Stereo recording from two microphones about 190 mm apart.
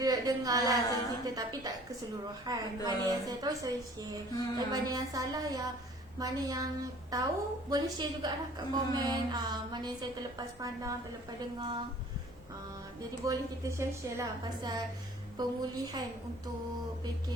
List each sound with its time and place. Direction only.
0.0 s a woman's voice: 20° right (ahead or behind)
0.9 s a woman's voice: 20° left (ahead or behind)
1.4 s a woman's voice: 20° right (ahead or behind)
13.2 s a woman's voice: 15° right (ahead or behind)